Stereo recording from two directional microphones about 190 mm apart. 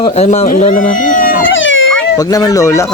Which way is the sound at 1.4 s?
80° left.